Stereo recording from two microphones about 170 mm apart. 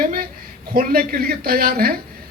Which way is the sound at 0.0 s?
55° right (ahead or behind).